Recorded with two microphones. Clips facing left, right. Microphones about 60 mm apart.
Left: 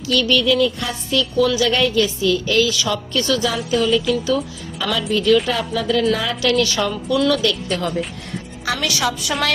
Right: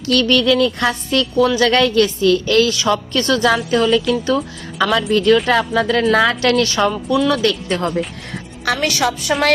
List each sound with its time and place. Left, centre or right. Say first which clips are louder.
0.1 s music: right 3 dB; right
1.2 s a woman's voice: right 2 dB; right
1.6 s music: right 4 dB; right
2.7 s a woman's voice: right 4 dB; right
8.6 s a woman's voice: right 4 dB; right
9.0 s a woman's voice: right 3 dB; right